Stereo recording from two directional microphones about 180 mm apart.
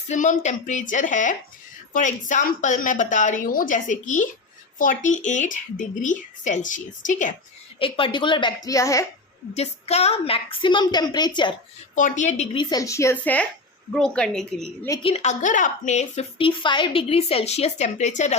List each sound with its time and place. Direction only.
0.1 s speech: 45° left (ahead or behind)
7.8 s a woman's voice: 30° left (ahead or behind)
9.6 s a woman's voice: 35° left (ahead or behind)
11.9 s a woman's voice: 45° left (ahead or behind)
12.5 s a woman's voice: 20° left (ahead or behind); by 14.7 s 5° left (ahead or behind)
15.0 s a woman's voice: 35° left (ahead or behind)
16.5 s a woman's voice: 25° left (ahead or behind)